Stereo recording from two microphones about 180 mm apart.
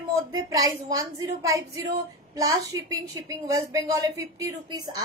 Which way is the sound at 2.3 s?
20° right (ahead or behind).